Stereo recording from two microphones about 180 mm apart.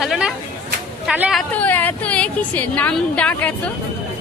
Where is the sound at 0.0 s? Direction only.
Centre (ahead or behind).